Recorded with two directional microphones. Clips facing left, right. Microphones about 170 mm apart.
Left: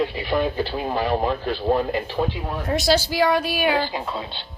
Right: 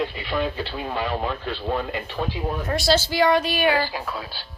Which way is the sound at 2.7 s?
15° left (ahead or behind).